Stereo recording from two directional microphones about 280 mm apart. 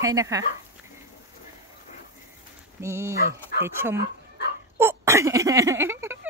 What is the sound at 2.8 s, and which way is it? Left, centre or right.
A woman's voice, centre.